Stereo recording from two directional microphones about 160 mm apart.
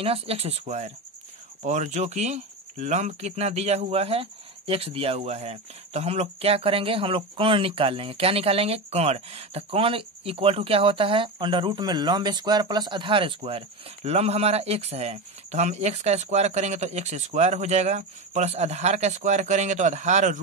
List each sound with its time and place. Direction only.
0.0 s speech: 35° right (ahead or behind)